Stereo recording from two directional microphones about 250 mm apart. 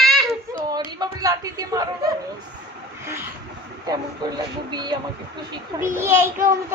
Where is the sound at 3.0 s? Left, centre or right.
Centre.